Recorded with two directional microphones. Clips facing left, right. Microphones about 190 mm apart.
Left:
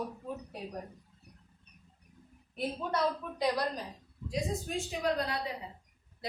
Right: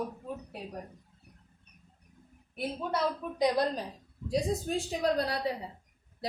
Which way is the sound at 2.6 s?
10° right (ahead or behind).